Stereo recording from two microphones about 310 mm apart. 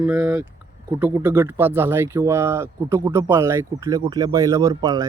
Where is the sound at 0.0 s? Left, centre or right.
Centre.